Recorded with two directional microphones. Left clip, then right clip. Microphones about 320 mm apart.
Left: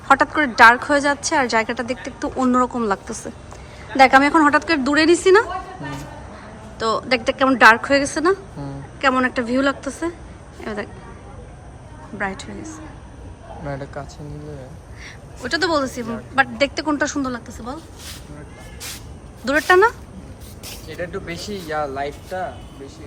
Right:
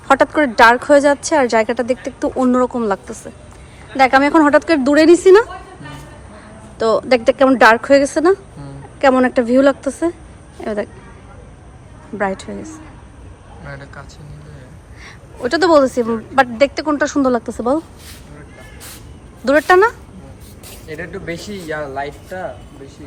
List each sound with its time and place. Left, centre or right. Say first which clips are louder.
0.1 s a woman's voice: right 3 dB; centre
6.7 s a woman's voice: right 6 dB; centre
12.1 s a woman's voice: right 6 dB; centre
13.7 s speech: left 4 dB; left
15.0 s a woman's voice: right 8 dB; centre
19.5 s a woman's voice: right 3 dB; centre
20.9 s speech: right 3 dB; right